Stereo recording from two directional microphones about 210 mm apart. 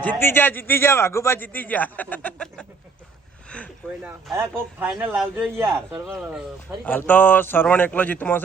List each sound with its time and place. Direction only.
0.0 s speech: 10° left (ahead or behind)
4.0 s a man's voice: 10° right (ahead or behind)
6.8 s speech: 10° left (ahead or behind)